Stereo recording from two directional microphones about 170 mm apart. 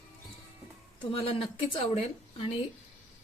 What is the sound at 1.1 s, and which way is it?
Speech, 35° left (ahead or behind).